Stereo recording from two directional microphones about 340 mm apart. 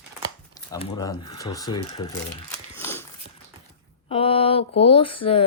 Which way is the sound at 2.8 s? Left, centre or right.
Centre.